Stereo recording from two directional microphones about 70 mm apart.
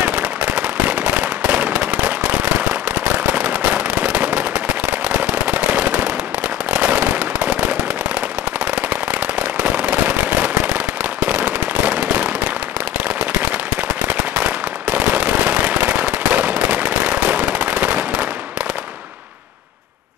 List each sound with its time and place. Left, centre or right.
0.0 s firecracker: centre
6.7 s fireworks: centre
9.6 s firecracker: centre
14.4 s firecracker: right